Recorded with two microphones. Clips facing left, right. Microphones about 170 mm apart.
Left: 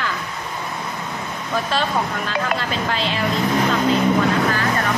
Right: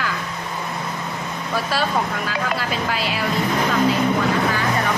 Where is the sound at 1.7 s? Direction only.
5° right (ahead or behind).